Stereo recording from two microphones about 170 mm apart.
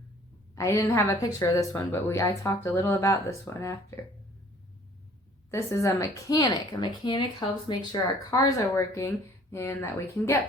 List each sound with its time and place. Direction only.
0.5 s speech: 20° left (ahead or behind)
5.5 s speech: 15° left (ahead or behind)